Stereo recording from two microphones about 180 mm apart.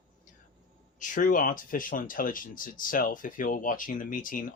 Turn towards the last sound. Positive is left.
turn(degrees=50)  # may be behind; listen again after turning